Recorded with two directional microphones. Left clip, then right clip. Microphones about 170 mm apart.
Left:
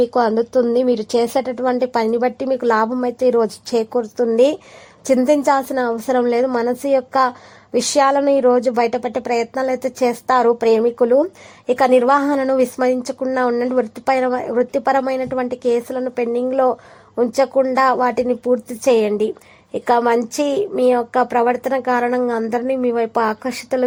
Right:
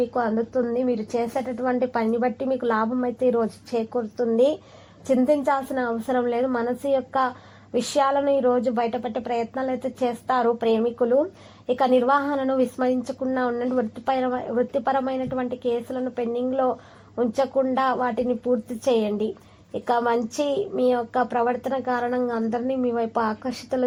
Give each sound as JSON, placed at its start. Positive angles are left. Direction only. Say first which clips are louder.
{"t": 0.1, "sound": "a woman's voice", "louder": "left 8 dB", "side_deg": 40}